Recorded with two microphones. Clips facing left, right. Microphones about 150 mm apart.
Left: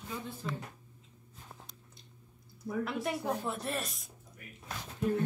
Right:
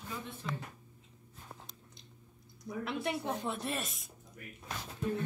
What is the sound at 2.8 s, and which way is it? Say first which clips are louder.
A woman's voice: even; centre (ahead or behind).